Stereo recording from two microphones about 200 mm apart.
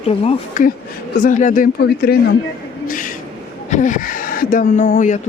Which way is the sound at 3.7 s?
40° left (ahead or behind).